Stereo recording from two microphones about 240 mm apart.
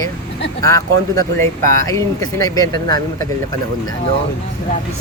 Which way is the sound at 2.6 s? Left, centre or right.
Centre.